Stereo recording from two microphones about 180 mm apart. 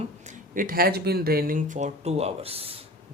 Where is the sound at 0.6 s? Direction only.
55° right (ahead or behind).